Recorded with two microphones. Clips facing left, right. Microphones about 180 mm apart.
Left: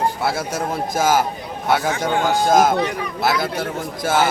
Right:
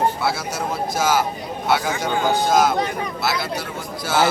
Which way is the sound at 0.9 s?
50° left (ahead or behind).